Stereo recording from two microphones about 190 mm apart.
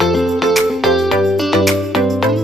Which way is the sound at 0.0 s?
Centre (ahead or behind).